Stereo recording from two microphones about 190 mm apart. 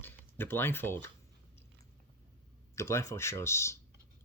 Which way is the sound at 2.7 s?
15° left (ahead or behind).